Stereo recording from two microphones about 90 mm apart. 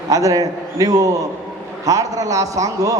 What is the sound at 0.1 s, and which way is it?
A man's voice, 40° right (ahead or behind).